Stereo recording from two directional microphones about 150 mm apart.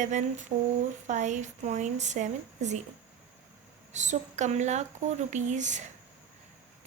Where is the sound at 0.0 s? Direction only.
55° right (ahead or behind).